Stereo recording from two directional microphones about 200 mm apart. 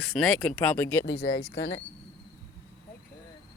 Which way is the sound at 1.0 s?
55° left (ahead or behind).